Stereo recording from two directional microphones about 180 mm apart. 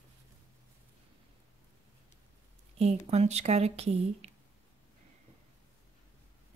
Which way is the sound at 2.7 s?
35° right (ahead or behind).